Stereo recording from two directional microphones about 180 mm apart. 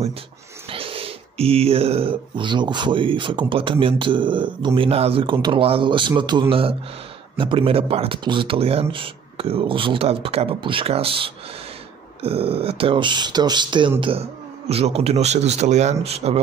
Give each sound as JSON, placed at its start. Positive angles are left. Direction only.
{"t": 0.7, "sound": "speech", "side_deg": -30}